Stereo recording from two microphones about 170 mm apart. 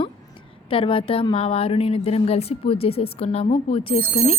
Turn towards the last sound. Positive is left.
turn(degrees=30)  # may be behind; listen again after turning